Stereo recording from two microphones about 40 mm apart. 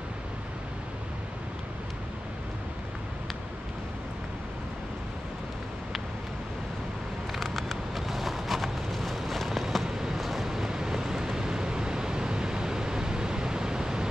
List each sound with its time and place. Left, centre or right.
7.3 s vehicle: centre
9.8 s vehicle: centre